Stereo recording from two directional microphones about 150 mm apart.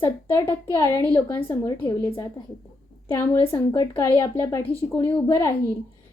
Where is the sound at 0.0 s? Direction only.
15° left (ahead or behind).